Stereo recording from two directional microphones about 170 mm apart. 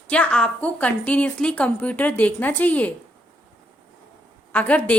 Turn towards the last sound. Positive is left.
turn(degrees=10)  # may be behind; listen again after turning